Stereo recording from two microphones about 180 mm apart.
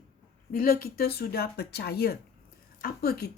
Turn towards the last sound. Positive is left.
turn(degrees=60)  # may be behind; listen again after turning